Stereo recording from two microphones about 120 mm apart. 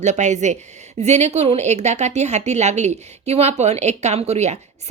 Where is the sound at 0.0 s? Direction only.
80° right.